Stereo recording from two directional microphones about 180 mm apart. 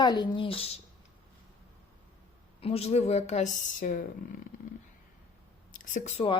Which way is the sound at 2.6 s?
35° left (ahead or behind).